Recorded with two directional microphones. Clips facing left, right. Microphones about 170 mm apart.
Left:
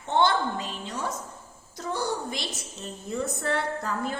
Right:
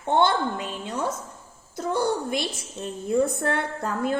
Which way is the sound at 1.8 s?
55° right (ahead or behind).